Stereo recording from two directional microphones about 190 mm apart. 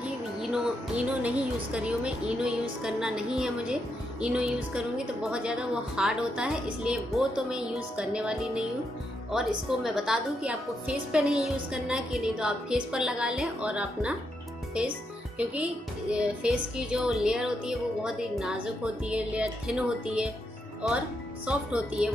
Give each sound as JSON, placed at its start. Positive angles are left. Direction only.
{"t": 0.4, "sound": "a woman's voice", "side_deg": -5}
{"t": 9.9, "sound": "a woman's voice", "side_deg": -5}
{"t": 21.5, "sound": "a woman's voice", "side_deg": -5}